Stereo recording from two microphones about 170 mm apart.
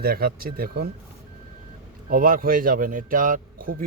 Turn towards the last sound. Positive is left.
turn(degrees=-55)  # may be behind; listen again after turning